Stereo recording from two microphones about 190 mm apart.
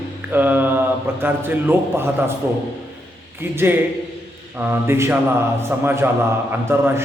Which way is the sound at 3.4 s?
10° right (ahead or behind).